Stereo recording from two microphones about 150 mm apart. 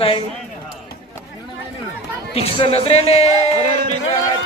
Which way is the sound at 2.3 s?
40° left (ahead or behind).